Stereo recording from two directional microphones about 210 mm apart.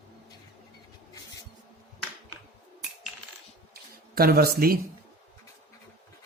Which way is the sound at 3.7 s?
45° right (ahead or behind).